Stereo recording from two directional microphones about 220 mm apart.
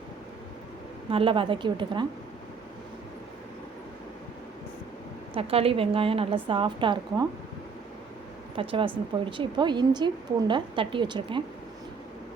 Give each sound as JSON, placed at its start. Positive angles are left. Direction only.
{"t": 1.1, "sound": "a woman's voice", "side_deg": -25}
{"t": 5.3, "sound": "a woman's voice", "side_deg": -25}
{"t": 8.5, "sound": "a woman's voice", "side_deg": -25}